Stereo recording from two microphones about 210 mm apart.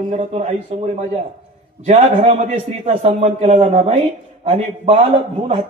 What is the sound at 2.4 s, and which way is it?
A man's voice, 30° right (ahead or behind).